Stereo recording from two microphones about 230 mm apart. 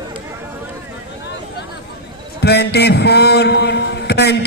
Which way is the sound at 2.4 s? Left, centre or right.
Left.